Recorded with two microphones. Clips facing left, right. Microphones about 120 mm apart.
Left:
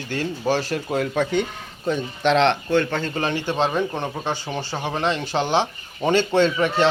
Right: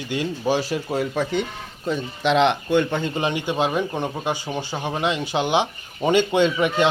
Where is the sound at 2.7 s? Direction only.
15° right (ahead or behind).